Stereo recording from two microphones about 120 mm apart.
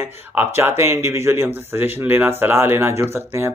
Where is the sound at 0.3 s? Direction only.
15° right (ahead or behind).